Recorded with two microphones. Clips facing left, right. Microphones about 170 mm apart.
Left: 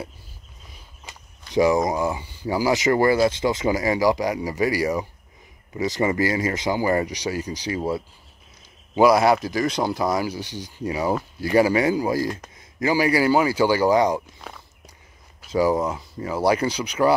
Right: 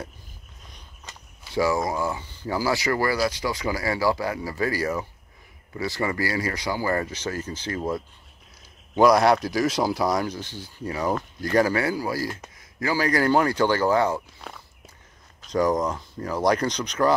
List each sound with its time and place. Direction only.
0.7 s walk: 5° left (ahead or behind)
1.5 s speech: 20° left (ahead or behind)
14.5 s walk: centre (ahead or behind)
15.4 s speech: 5° left (ahead or behind)